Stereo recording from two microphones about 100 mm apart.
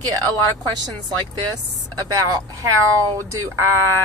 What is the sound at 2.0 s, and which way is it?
Speech, 40° right (ahead or behind).